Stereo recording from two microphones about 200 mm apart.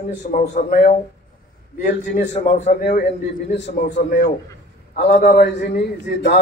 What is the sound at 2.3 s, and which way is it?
Speech, 35° left (ahead or behind).